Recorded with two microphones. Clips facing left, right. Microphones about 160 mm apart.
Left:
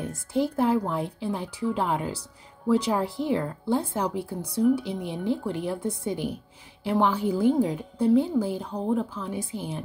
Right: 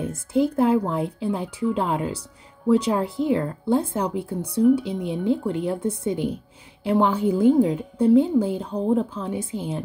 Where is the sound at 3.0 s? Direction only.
20° right (ahead or behind).